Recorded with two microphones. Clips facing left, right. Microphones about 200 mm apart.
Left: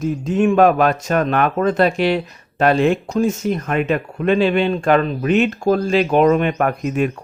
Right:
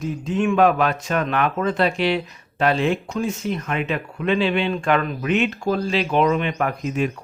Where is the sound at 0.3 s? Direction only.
45° left (ahead or behind).